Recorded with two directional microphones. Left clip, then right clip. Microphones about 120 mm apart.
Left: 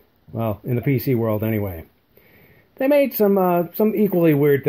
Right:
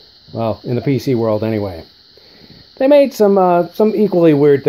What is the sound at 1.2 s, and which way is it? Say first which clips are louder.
Speech: right 6 dB; 85° left.